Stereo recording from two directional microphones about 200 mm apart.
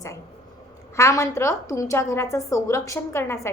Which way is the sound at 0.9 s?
15° left (ahead or behind).